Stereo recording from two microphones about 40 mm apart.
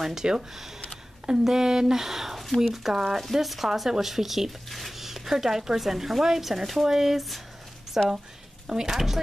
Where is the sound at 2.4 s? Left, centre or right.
Centre.